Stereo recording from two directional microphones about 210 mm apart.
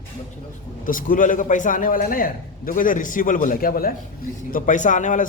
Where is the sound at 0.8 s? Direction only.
40° left (ahead or behind).